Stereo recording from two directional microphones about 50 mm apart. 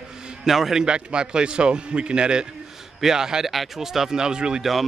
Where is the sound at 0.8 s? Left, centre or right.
Centre.